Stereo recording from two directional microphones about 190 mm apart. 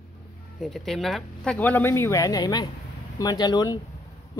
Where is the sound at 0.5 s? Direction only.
Centre (ahead or behind).